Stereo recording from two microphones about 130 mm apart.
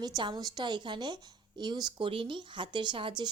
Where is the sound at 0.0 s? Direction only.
35° right (ahead or behind).